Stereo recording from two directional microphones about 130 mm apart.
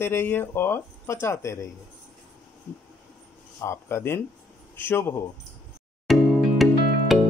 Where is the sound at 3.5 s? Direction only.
20° left (ahead or behind).